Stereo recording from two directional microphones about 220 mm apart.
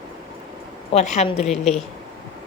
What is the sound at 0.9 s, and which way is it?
Speech, 30° left (ahead or behind).